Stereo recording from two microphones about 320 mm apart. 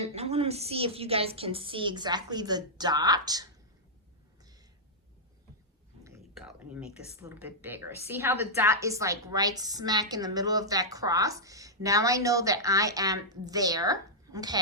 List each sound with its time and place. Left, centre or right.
0.0 s speech: centre
6.1 s speech: centre